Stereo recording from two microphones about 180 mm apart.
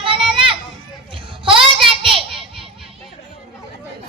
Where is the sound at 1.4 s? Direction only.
30° right (ahead or behind).